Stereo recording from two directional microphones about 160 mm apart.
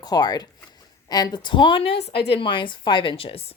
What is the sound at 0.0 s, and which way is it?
A woman's voice, 25° left (ahead or behind).